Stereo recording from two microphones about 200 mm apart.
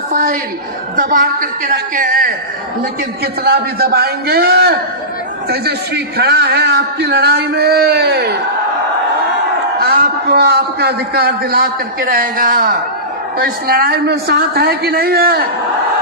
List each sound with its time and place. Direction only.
0.1 s a woman's voice: 40° right (ahead or behind)
3.4 s a man's voice: 50° right (ahead or behind)
9.8 s a man's voice: 50° right (ahead or behind)